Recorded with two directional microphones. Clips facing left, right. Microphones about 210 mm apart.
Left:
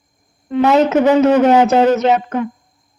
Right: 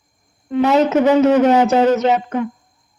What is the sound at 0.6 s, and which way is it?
Speech, 75° left (ahead or behind).